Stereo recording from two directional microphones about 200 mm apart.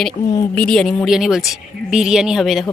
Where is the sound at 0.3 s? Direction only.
15° left (ahead or behind).